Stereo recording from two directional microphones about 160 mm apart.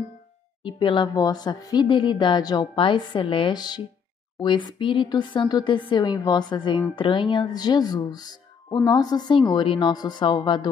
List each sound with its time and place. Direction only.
0.7 s speech: 30° left (ahead or behind)